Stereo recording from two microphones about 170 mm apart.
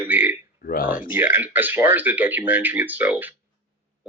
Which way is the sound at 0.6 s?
55° left (ahead or behind).